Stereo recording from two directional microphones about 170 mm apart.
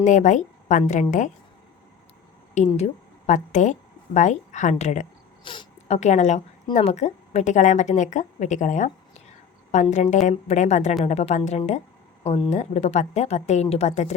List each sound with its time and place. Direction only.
0.0 s a woman's voice: 45° left (ahead or behind)
2.6 s a woman's voice: 40° left (ahead or behind)
5.4 s a sound: 30° left (ahead or behind)
6.0 s a woman's voice: 45° left (ahead or behind)